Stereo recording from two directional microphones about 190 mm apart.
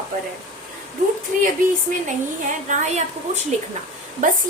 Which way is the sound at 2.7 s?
35° right (ahead or behind).